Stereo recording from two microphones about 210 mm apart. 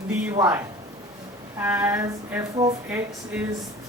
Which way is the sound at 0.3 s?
15° right (ahead or behind).